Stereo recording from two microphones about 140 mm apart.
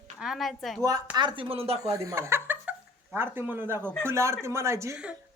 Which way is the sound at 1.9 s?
20° right (ahead or behind).